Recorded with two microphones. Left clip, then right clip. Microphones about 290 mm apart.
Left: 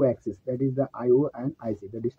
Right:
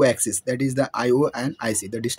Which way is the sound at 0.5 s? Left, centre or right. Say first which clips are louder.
Right 4 dB; right.